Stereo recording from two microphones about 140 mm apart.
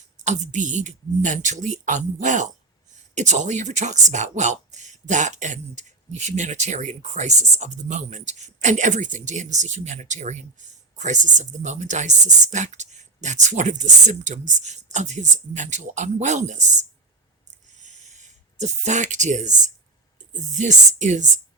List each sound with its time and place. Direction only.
0.3 s speech: 60° right (ahead or behind)
17.7 s a sound: 60° right (ahead or behind)
20.3 s speech: 60° right (ahead or behind)